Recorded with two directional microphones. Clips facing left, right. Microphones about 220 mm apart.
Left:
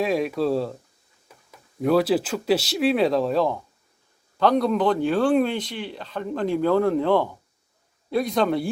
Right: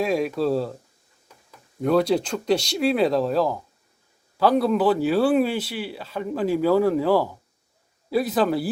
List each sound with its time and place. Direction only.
0.0 s speech: centre (ahead or behind)
1.8 s speech: centre (ahead or behind)